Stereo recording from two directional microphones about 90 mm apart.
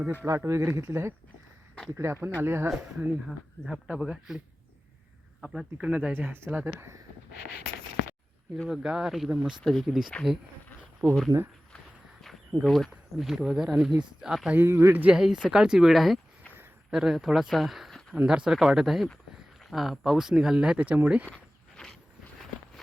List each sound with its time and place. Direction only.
0.3 s speech: 35° right (ahead or behind)
2.6 s speech: 10° right (ahead or behind)
5.7 s speech: 10° right (ahead or behind); by 7.0 s 30° right (ahead or behind)
8.5 s speech: 10° left (ahead or behind)
8.8 s speech: 10° right (ahead or behind)
12.6 s speech: centre (ahead or behind)
14.5 s speech: 25° right (ahead or behind)
14.9 s speech: 15° right (ahead or behind)
21.2 s walk: 10° left (ahead or behind)